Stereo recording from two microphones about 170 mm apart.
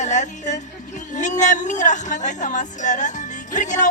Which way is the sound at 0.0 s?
45° left (ahead or behind).